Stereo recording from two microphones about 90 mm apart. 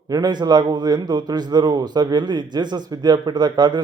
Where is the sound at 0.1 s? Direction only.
50° right (ahead or behind).